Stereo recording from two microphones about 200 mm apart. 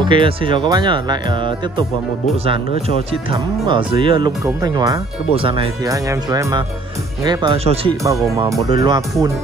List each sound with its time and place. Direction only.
0.0 s speech: 25° right (ahead or behind)
3.1 s speech: 25° right (ahead or behind)
8.0 s speech: 15° right (ahead or behind)